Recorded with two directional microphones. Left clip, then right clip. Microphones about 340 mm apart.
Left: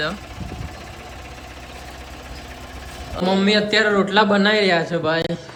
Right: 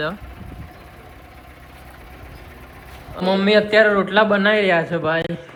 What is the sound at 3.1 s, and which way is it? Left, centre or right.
A man's voice, centre.